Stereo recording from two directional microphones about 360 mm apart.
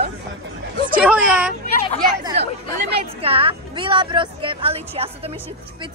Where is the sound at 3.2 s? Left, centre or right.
Centre.